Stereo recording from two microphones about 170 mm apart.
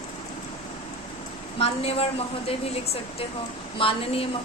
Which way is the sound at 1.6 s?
35° left (ahead or behind).